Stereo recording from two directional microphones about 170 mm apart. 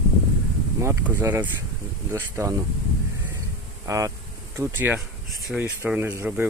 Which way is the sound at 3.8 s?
20° right (ahead or behind).